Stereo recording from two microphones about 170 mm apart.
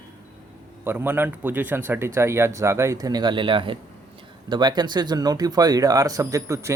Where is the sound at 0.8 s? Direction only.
15° right (ahead or behind).